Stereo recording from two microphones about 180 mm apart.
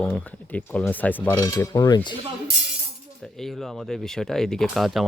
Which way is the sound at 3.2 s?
Centre (ahead or behind).